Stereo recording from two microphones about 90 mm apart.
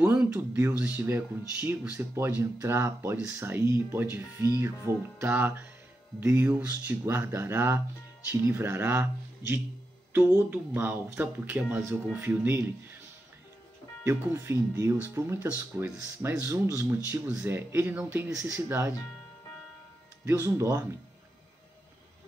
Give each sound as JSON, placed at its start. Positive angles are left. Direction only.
{"t": 0.1, "sound": "speech", "side_deg": -15}
{"t": 3.2, "sound": "speech", "side_deg": -15}
{"t": 3.4, "sound": "speech", "side_deg": -30}
{"t": 14.0, "sound": "speech", "side_deg": -25}
{"t": 17.1, "sound": "speech", "side_deg": -15}
{"t": 17.5, "sound": "speech", "side_deg": -25}
{"t": 20.2, "sound": "speech", "side_deg": -25}